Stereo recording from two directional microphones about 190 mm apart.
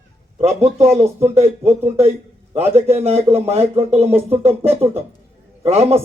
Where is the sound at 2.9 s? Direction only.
35° right (ahead or behind).